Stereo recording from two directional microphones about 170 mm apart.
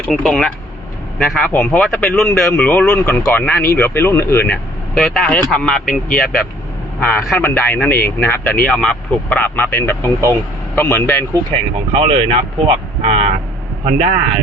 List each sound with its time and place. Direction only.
0.1 s speech: 5° left (ahead or behind)
7.0 s speech: 5° left (ahead or behind)
11.9 s speech: 30° right (ahead or behind)
13.8 s a man's voice: 45° right (ahead or behind)